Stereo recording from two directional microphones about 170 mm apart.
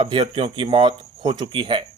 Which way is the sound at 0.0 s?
30° right (ahead or behind).